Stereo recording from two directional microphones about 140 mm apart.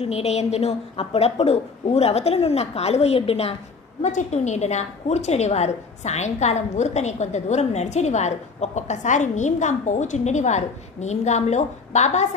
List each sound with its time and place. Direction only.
0.0 s a woman's voice: 50° left (ahead or behind)
4.0 s a woman's voice: 55° left (ahead or behind)